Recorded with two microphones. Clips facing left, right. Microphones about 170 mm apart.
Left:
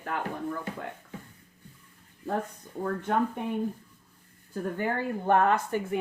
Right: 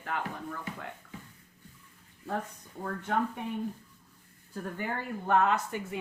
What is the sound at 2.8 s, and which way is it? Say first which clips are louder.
Speech: left 4 dB; 45° left (ahead or behind).